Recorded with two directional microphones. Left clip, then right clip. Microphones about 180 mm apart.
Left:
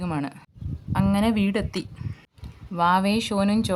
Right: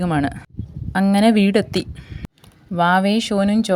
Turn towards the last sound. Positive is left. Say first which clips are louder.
# right 5 dB
turn(degrees=-20)  # may be behind; listen again after turning